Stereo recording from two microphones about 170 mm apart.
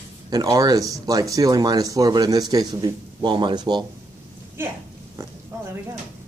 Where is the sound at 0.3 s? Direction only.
20° right (ahead or behind).